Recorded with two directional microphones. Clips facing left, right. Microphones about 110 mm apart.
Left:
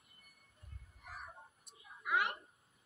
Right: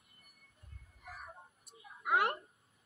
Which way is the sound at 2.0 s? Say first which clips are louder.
Right 4 dB; 50° right (ahead or behind).